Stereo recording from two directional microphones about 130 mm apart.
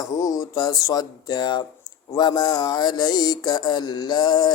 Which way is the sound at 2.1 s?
30° left (ahead or behind).